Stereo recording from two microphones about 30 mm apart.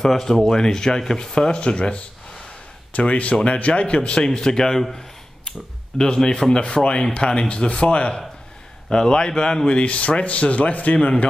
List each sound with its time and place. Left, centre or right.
0.2 s a man's voice: centre; by 2.0 s left
3.0 s speech: left
4.4 s a man's voice: centre
5.9 s speech: left
6.5 s speech: left
8.9 s speech: left
9.8 s speech: left